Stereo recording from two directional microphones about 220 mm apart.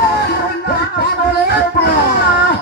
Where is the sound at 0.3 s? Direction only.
45° left (ahead or behind).